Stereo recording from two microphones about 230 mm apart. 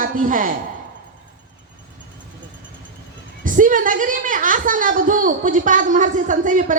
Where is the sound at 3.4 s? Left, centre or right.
Right.